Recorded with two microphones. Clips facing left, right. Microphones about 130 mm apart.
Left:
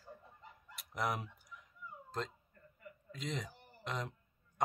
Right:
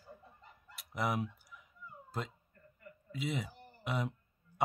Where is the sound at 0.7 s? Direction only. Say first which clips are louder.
Right 3 dB; centre (ahead or behind).